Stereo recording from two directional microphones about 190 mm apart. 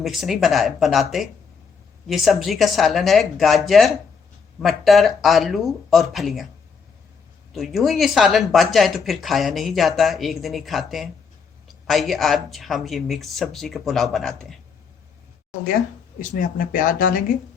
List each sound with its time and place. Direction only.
0.0 s speech: centre (ahead or behind)
2.0 s speech: centre (ahead or behind)
7.5 s speech: centre (ahead or behind)
16.4 s speech: 45° left (ahead or behind)